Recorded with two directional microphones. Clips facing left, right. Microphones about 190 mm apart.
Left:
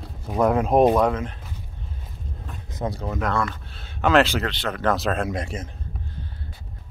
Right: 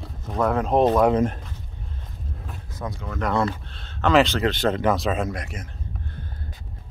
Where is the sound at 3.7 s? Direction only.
10° left (ahead or behind).